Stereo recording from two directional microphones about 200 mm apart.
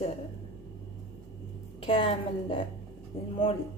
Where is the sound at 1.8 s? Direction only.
25° left (ahead or behind).